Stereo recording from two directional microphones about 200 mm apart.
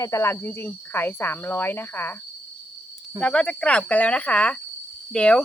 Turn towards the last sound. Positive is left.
turn(degrees=5)  # may be behind; listen again after turning